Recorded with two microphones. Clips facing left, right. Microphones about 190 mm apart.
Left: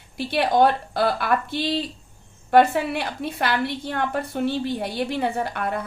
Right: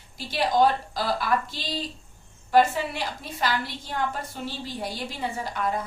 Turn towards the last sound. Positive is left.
turn(degrees=60)  # may be behind; listen again after turning